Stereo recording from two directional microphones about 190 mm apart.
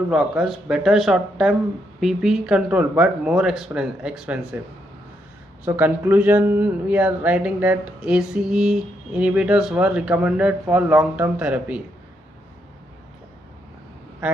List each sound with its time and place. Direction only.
0.1 s speech: 5° right (ahead or behind)
5.6 s speech: 10° right (ahead or behind)